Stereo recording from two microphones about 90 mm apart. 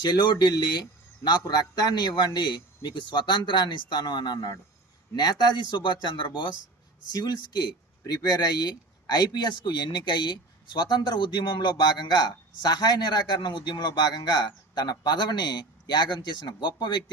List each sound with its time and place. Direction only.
0.0 s speech: 50° left (ahead or behind)
7.1 s speech: 50° left (ahead or behind)